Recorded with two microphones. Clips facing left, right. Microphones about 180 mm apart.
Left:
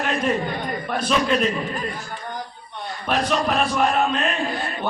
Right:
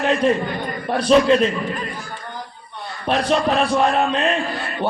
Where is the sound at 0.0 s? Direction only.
30° right (ahead or behind).